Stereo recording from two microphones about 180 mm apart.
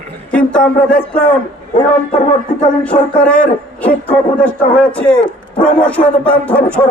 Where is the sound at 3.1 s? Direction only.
5° left (ahead or behind).